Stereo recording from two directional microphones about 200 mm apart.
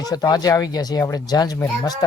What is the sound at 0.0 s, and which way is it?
Speech, 20° left (ahead or behind).